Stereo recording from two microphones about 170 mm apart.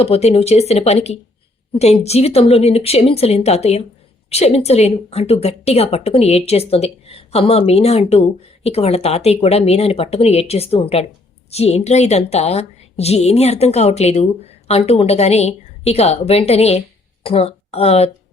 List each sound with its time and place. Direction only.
0.0 s a woman's voice: 35° left (ahead or behind)